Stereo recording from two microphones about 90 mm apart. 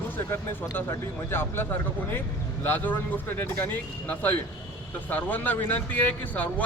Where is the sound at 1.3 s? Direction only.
25° left (ahead or behind).